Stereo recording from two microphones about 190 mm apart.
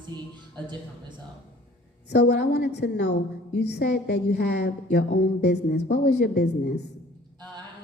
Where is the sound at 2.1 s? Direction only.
60° left (ahead or behind).